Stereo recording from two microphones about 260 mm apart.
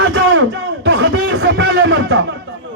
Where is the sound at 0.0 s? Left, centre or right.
Right.